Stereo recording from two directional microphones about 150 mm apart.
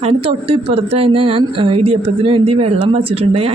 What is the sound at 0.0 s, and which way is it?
A woman's voice, 40° right (ahead or behind).